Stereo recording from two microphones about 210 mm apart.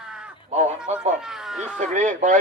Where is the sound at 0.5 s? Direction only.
30° right (ahead or behind).